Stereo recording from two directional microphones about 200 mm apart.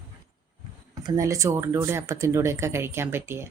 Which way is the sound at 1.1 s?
15° right (ahead or behind).